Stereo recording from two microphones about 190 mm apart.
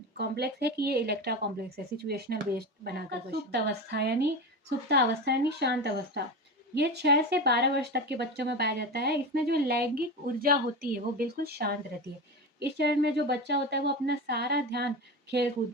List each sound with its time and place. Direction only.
0.2 s speech: 60° right (ahead or behind)